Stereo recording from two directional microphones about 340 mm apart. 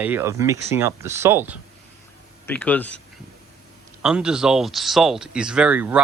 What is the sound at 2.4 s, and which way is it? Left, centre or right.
Speech, centre.